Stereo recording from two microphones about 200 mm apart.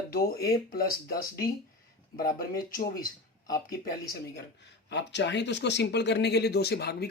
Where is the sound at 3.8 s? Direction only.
45° left (ahead or behind).